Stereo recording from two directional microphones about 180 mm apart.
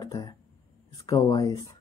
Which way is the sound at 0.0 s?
20° left (ahead or behind).